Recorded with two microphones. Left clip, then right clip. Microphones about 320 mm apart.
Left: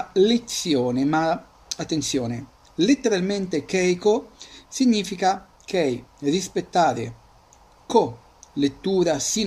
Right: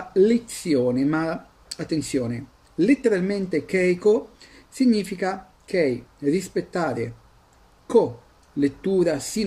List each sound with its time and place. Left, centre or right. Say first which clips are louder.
0.1 s speech: right 1 dB; centre
4.4 s a sound: left 5 dB; centre
4.7 s speech: even; centre
8.5 s speech: even; centre